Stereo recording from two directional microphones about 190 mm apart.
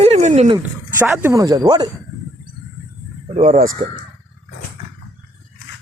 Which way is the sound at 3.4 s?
45° right (ahead or behind).